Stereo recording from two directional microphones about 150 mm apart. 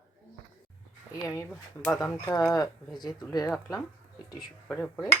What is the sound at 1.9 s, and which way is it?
Speech, 25° left (ahead or behind).